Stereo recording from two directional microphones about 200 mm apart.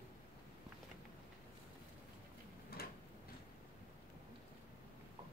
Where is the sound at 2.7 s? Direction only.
50° left (ahead or behind).